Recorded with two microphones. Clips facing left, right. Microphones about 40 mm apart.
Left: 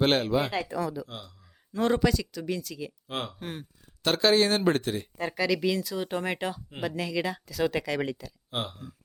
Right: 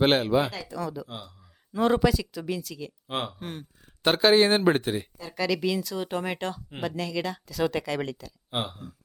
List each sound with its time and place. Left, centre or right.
0.0 s speech: centre
0.8 s speech: centre
1.0 s speech: centre
3.1 s speech: right
3.3 s speech: centre
4.0 s speech: centre
5.3 s speech: centre
8.4 s speech: right